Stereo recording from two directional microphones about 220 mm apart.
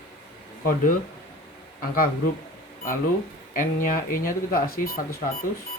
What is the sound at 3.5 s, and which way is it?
Speech, 40° left (ahead or behind).